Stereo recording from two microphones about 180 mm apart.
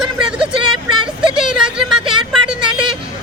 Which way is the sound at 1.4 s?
5° right (ahead or behind).